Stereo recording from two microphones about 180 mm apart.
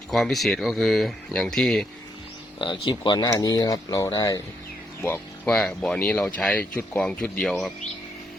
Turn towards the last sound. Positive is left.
turn(degrees=0)  # may be behind; listen again after turning